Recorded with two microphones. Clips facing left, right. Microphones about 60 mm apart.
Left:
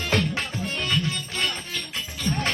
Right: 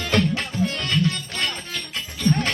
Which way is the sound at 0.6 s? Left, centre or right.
Right.